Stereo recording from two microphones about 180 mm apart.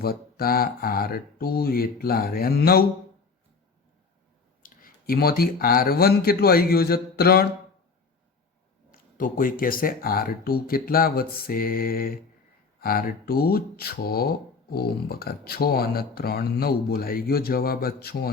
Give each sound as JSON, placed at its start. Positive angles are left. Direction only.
{"t": 0.0, "sound": "speech", "side_deg": 55}
{"t": 4.6, "sound": "speech", "side_deg": 55}
{"t": 8.9, "sound": "speech", "side_deg": 50}